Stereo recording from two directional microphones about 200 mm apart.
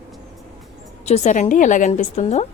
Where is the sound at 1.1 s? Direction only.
35° left (ahead or behind).